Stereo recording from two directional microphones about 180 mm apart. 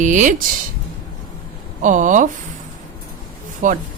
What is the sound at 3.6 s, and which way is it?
Speech, 45° right (ahead or behind).